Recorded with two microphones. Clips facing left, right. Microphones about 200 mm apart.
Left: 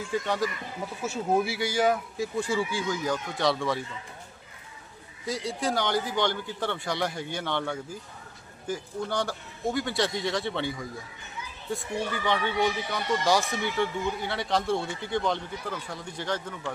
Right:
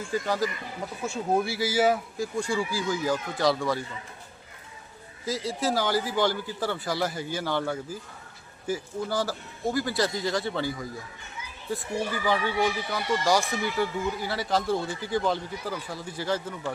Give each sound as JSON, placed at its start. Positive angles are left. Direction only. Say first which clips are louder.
{"t": 0.1, "sound": "speech", "louder": "right 1 dB", "side_deg": 0}
{"t": 5.2, "sound": "speech", "louder": "right 1 dB", "side_deg": 0}